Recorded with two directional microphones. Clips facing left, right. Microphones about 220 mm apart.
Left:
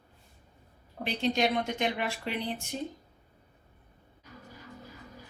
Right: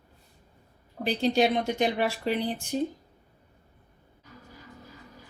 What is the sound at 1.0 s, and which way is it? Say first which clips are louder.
Speech: right 4 dB; 35° right (ahead or behind).